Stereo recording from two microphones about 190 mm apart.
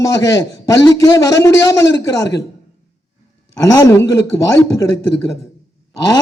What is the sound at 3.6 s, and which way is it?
A man's voice, 15° left (ahead or behind).